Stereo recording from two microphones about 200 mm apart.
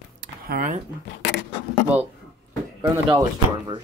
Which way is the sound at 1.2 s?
60° left (ahead or behind).